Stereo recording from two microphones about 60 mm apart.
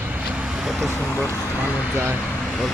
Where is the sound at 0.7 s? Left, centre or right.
Centre.